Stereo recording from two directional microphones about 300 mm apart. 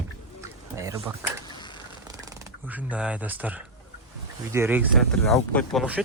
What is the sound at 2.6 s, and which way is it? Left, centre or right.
Speech, centre.